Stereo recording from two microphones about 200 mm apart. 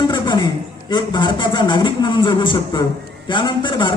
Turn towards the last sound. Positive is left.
turn(degrees=25)  # may be behind; listen again after turning